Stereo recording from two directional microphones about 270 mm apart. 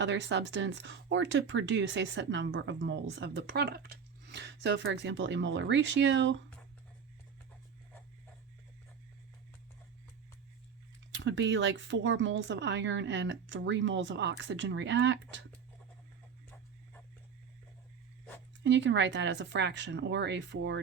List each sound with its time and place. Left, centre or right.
0.0 s speech: right
11.2 s speech: right
18.6 s speech: right